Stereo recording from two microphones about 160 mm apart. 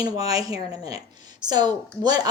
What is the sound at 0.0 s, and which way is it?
A woman's voice, 20° right (ahead or behind).